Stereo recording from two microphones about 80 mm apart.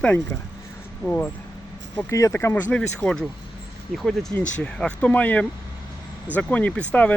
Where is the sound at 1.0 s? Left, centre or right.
Left.